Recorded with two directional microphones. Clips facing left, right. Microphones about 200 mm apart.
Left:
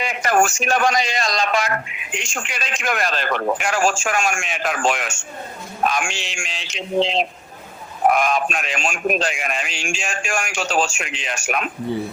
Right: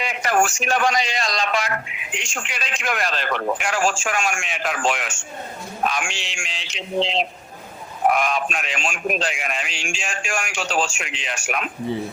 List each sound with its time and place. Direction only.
0.0 s a man's voice: 45° left (ahead or behind)